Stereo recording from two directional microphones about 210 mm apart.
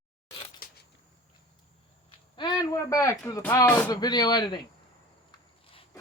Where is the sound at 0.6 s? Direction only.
45° left (ahead or behind).